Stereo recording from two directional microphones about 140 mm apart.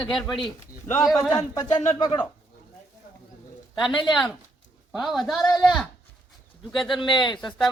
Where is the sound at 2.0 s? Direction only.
35° left (ahead or behind).